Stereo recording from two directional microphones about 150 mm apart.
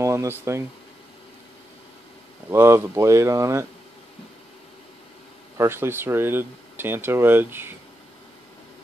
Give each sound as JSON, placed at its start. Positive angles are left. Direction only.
{"t": 0.0, "sound": "speech", "side_deg": -20}
{"t": 2.5, "sound": "speech", "side_deg": -15}
{"t": 5.6, "sound": "speech", "side_deg": -15}